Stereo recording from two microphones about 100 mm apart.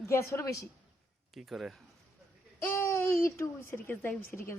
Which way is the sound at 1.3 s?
Centre (ahead or behind).